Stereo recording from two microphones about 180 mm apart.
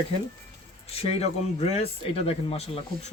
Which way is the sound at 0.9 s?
35° left (ahead or behind).